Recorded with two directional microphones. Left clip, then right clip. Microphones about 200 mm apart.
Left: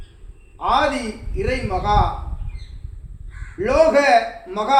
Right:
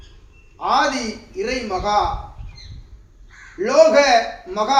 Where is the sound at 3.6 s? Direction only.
10° left (ahead or behind).